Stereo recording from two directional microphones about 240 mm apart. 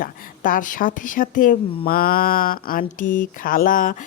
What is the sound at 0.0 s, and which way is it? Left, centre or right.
Speech, left.